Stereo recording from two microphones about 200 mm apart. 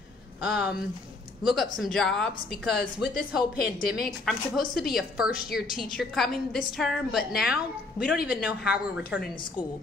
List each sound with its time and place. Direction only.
0.4 s a woman's voice: 5° right (ahead or behind)
3.6 s a woman's voice: 50° left (ahead or behind)
4.0 s a woman's voice: centre (ahead or behind)